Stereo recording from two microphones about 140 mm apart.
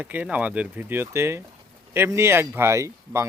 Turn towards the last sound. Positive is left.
turn(degrees=-20)  # may be behind; listen again after turning